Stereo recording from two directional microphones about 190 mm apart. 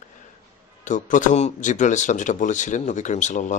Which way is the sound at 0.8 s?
40° left (ahead or behind).